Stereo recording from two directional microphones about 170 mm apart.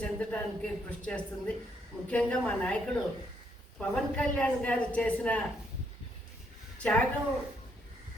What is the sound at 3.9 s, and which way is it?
A woman's voice, 5° left (ahead or behind).